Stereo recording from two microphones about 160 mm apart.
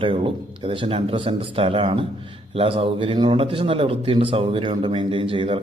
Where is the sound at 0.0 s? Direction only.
35° right (ahead or behind).